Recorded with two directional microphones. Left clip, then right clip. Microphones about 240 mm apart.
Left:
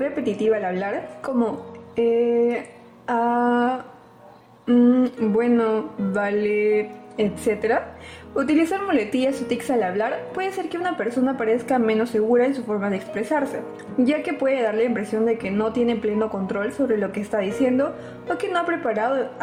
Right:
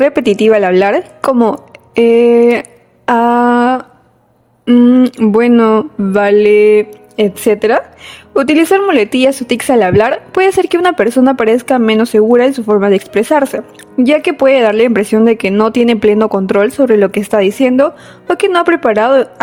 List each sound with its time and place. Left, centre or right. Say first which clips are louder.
0.0 s speech: right 13 dB; right